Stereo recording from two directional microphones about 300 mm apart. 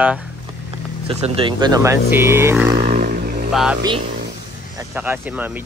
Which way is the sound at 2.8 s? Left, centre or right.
Right.